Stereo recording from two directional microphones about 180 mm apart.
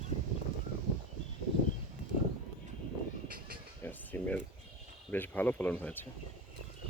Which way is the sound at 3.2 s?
55° right (ahead or behind).